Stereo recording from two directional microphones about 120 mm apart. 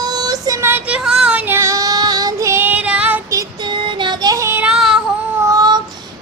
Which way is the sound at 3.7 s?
40° right (ahead or behind).